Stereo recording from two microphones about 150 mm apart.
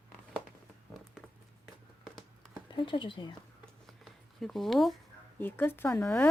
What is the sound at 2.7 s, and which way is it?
Speech, 35° left (ahead or behind).